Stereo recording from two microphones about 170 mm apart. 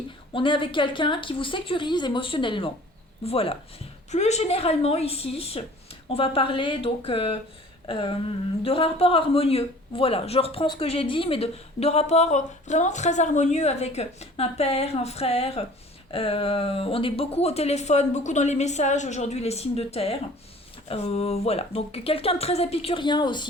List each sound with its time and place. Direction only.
0.3 s a woman's voice: 30° left (ahead or behind)
8.6 s a man's voice: 35° left (ahead or behind)